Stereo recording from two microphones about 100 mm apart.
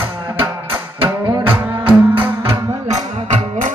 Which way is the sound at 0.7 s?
60° right (ahead or behind).